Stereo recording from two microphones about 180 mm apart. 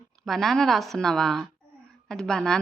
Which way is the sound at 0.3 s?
Centre (ahead or behind).